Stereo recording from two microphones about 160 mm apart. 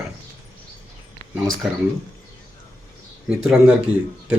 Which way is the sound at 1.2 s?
25° left (ahead or behind).